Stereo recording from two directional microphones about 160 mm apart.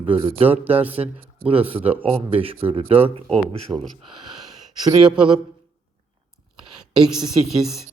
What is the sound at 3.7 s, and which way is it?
Speech, 5° right (ahead or behind).